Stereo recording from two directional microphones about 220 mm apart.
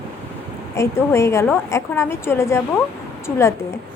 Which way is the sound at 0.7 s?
10° left (ahead or behind).